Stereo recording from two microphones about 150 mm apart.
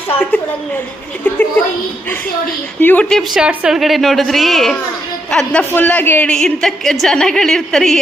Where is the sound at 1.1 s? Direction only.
10° left (ahead or behind).